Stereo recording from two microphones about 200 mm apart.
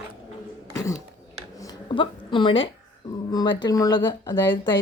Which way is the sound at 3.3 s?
20° left (ahead or behind).